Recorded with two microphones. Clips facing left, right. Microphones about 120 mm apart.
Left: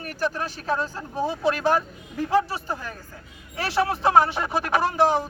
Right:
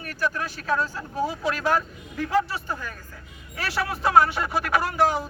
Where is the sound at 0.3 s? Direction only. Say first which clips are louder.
Even; 25° left (ahead or behind).